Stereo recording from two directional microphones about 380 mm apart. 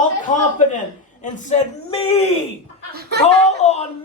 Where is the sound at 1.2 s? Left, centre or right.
Centre.